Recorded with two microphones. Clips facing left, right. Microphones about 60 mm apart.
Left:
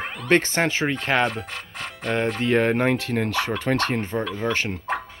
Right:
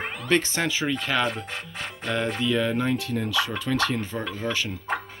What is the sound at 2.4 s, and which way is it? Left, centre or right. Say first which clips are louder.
Speech: left 6 dB; left.